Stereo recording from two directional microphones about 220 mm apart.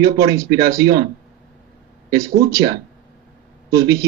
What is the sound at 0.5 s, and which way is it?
Speech, 45° right (ahead or behind).